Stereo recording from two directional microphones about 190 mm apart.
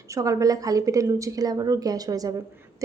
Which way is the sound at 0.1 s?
15° right (ahead or behind).